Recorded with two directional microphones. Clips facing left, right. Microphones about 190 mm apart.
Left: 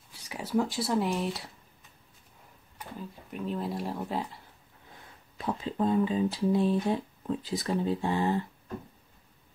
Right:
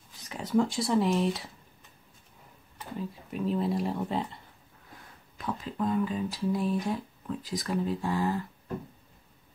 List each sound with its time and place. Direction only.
0.1 s speech: 10° left (ahead or behind)
3.0 s speech: centre (ahead or behind)
5.4 s speech: 25° left (ahead or behind)